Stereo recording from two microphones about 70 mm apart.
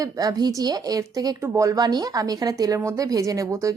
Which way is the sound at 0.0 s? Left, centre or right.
Right.